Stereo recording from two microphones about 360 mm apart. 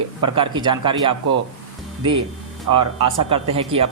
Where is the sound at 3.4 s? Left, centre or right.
Centre.